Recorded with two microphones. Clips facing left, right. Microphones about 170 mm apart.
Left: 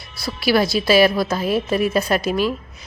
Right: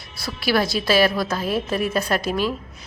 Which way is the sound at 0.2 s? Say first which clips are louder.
Left 3 dB; 10° left (ahead or behind).